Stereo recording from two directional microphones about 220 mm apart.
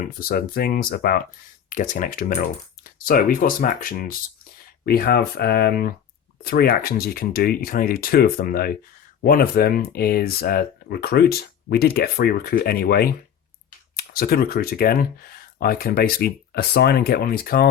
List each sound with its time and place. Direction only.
0.2 s speech: 40° left (ahead or behind)